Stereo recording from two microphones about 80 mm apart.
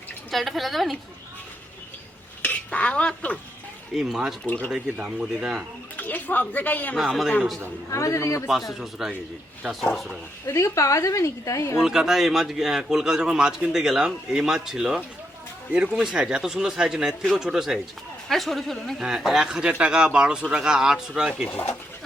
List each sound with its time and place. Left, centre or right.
0.3 s speech: centre
2.4 s speech: centre
3.9 s speech: centre
4.4 s speech: left
4.7 s a man's voice: centre
6.0 s speech: left
6.9 s speech: centre
7.9 s speech: left
8.7 s speech: centre
10.4 s speech: left
11.8 s a man's voice: centre